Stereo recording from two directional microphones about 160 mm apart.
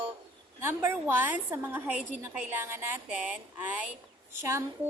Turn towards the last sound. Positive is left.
turn(degrees=-15)  # may be behind; listen again after turning